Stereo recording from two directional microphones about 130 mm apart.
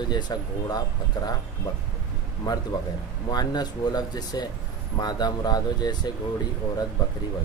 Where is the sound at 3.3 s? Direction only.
30° left (ahead or behind).